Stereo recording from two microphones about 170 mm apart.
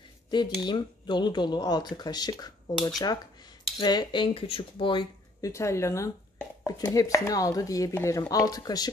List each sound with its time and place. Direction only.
0.3 s speech: 25° left (ahead or behind)
5.5 s speech: 15° left (ahead or behind)